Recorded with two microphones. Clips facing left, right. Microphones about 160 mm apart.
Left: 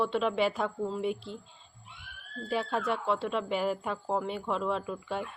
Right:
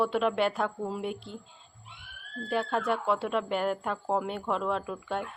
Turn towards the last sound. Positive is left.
turn(degrees=0)  # may be behind; listen again after turning